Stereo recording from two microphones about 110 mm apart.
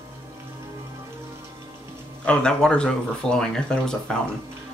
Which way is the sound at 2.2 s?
10° left (ahead or behind).